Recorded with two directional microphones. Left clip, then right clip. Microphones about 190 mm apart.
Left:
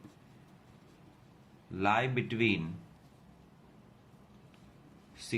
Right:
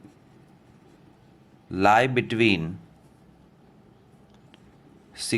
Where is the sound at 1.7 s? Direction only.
60° right (ahead or behind).